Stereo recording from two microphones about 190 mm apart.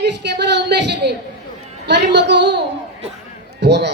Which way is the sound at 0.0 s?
60° right (ahead or behind).